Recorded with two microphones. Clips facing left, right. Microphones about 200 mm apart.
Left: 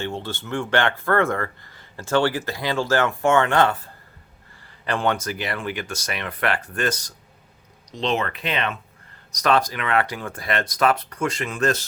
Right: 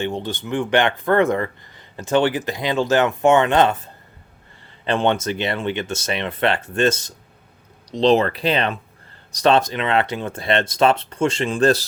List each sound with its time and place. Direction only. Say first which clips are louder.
0.0 s speech: right 4 dB; 15° right (ahead or behind); by 11.9 s 35° right (ahead or behind)